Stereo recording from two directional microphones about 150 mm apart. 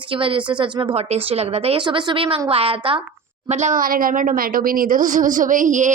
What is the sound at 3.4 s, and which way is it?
Speech, 50° right (ahead or behind).